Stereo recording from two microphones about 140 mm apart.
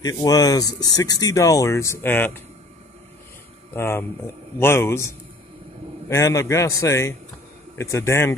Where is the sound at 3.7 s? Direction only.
15° left (ahead or behind).